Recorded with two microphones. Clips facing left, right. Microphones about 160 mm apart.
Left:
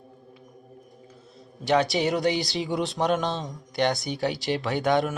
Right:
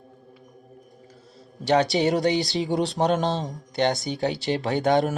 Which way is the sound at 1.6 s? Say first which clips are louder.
Right 2 dB; 35° right (ahead or behind).